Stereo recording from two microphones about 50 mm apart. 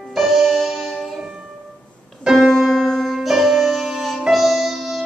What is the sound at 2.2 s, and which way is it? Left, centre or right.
Music, centre.